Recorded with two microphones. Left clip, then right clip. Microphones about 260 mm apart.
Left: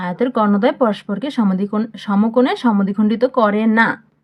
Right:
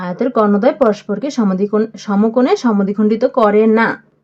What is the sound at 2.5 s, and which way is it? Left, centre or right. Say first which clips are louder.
Speech: right 3 dB; left.